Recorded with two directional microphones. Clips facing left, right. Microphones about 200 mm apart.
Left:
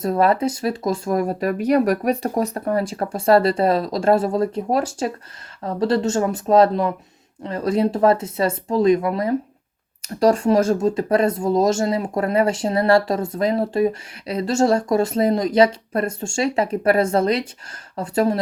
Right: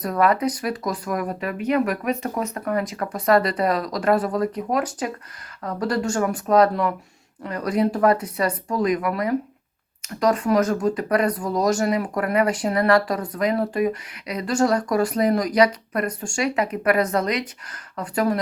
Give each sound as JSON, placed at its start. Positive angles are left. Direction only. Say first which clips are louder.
{"t": 0.0, "sound": "speech", "louder": "left 2 dB", "side_deg": 30}